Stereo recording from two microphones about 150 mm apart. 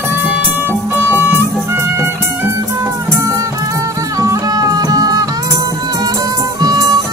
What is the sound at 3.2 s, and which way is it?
Music, 20° right (ahead or behind).